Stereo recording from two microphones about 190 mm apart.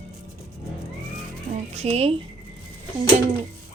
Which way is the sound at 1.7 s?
35° right (ahead or behind).